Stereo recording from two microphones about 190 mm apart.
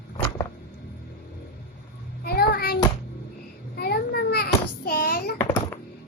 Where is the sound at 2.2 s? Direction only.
55° left (ahead or behind).